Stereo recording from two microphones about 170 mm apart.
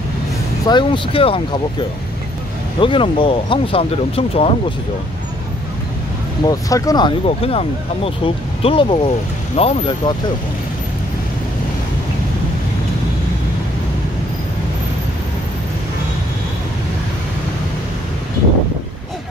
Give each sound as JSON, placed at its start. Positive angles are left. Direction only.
{"t": 0.7, "sound": "speech", "side_deg": 30}
{"t": 6.4, "sound": "speech", "side_deg": 20}